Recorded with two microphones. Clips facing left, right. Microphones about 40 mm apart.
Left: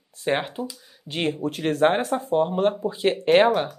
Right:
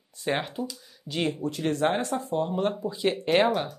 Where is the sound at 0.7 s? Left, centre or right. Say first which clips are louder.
Even; centre.